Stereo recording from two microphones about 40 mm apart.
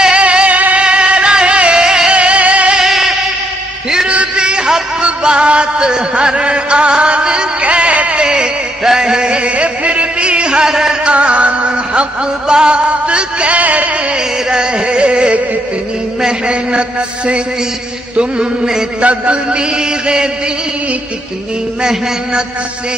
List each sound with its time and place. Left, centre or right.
0.0 s music: right
0.8 s music: right
1.8 s music: centre
2.1 s music: right
2.8 s music: centre
4.1 s a sound: right
7.6 s music: right
10.7 s music: centre
11.1 s music: right
14.1 s music: right
16.2 s a sound: right
18.1 s a sound: right
18.9 s a sound: right